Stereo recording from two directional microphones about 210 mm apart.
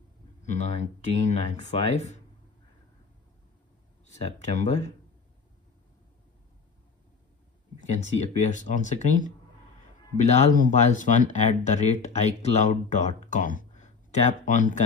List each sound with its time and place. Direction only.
0.5 s speech: 35° left (ahead or behind)
4.2 s speech: 35° left (ahead or behind)
8.0 s speech: 35° left (ahead or behind)